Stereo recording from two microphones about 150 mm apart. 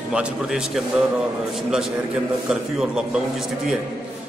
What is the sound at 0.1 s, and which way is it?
Speech, 5° right (ahead or behind).